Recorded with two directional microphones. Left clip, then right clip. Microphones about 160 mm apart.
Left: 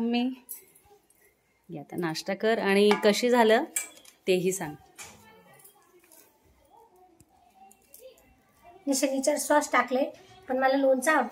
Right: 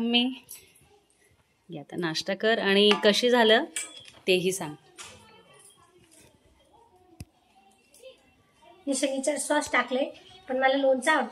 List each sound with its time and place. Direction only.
0.0 s a woman's voice: 5° left (ahead or behind)
1.7 s a woman's voice: 5° left (ahead or behind)
8.8 s a woman's voice: 10° left (ahead or behind)